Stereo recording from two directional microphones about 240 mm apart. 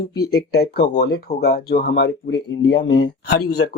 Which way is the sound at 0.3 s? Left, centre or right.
Left.